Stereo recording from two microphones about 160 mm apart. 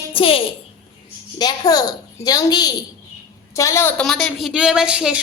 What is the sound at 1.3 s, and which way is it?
A child's voice, 25° left (ahead or behind).